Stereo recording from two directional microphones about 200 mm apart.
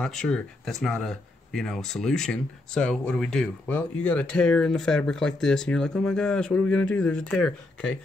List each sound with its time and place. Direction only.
0.0 s speech: 5° left (ahead or behind)